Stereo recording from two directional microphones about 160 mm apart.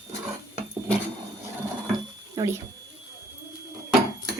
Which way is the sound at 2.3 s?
25° right (ahead or behind).